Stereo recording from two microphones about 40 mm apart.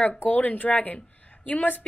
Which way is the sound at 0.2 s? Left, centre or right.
Left.